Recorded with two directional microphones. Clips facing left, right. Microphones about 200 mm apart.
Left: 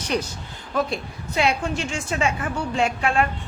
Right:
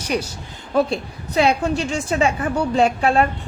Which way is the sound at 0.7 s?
35° right (ahead or behind).